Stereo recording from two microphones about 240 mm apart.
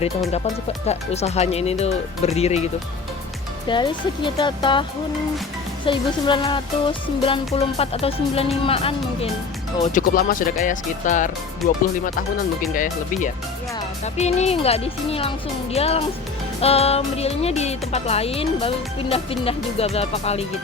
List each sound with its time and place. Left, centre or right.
0.9 s speech: left
3.7 s speech: centre
9.8 s speech: left
12.7 s speech: left